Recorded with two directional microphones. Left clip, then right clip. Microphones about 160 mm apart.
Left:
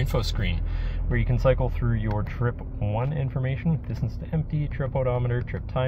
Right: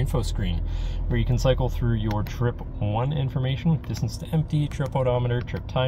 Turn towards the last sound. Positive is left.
turn(degrees=-40)  # may be behind; listen again after turning